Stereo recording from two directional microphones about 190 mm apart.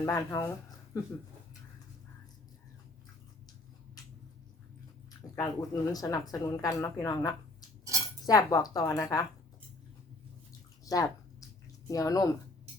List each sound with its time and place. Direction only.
0.0 s speech: 15° left (ahead or behind)
5.2 s speech: 20° left (ahead or behind)
10.8 s a sound: 20° left (ahead or behind)
11.9 s speech: 20° left (ahead or behind)